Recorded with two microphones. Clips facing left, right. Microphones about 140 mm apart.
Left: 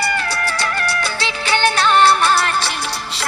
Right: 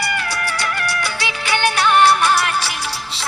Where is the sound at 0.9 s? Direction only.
15° right (ahead or behind).